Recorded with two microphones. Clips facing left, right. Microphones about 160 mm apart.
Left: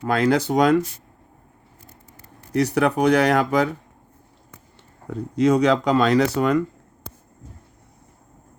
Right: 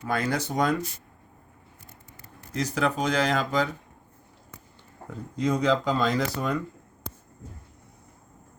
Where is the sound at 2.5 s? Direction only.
70° left (ahead or behind).